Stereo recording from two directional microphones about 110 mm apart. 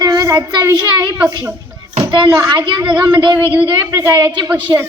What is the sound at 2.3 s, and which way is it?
Speech, 25° right (ahead or behind).